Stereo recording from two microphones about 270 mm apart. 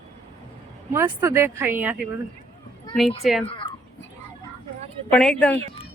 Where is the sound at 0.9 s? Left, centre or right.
Centre.